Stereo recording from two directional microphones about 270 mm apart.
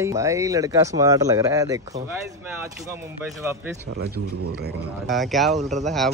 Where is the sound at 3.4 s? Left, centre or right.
Centre.